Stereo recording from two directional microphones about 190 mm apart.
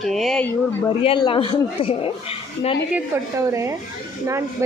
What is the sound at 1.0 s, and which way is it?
Speech, 25° left (ahead or behind).